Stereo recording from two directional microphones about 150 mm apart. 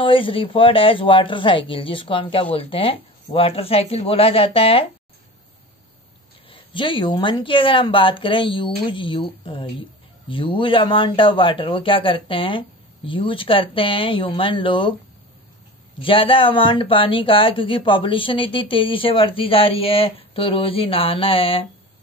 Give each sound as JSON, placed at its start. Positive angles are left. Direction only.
{"t": 0.0, "sound": "speech", "side_deg": 35}
{"t": 6.5, "sound": "speech", "side_deg": 35}
{"t": 16.0, "sound": "speech", "side_deg": 35}